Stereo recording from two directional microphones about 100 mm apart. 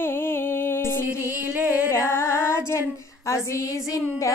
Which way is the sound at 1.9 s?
25° left (ahead or behind).